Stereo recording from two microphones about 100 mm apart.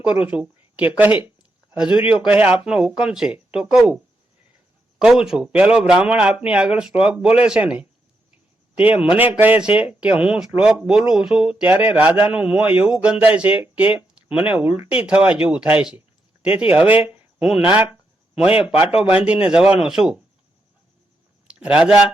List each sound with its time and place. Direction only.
0.0 s a man's voice: 15° right (ahead or behind)
4.9 s a man's voice: 5° right (ahead or behind)
21.4 s a sound: 10° right (ahead or behind)